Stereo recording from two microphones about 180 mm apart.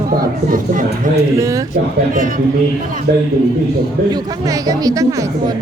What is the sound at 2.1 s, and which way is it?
Speech, 45° right (ahead or behind).